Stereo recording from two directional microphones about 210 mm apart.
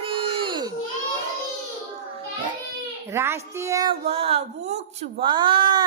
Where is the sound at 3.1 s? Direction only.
10° right (ahead or behind).